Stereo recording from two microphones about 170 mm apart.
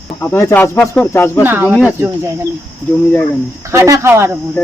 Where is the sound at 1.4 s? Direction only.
10° right (ahead or behind).